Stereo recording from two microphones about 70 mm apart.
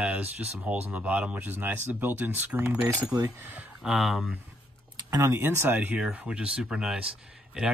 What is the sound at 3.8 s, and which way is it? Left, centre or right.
Speech, centre.